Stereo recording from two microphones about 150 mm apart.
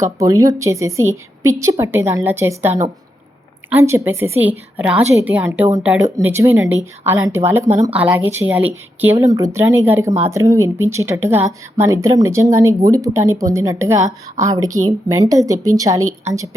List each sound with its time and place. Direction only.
0.0 s a woman's voice: 20° right (ahead or behind)
7.7 s speech: 50° right (ahead or behind)
7.9 s a woman's voice: 10° right (ahead or behind)
9.1 s speech: 20° right (ahead or behind)